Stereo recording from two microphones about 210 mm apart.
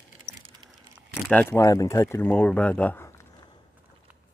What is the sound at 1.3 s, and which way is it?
Speech, 10° left (ahead or behind).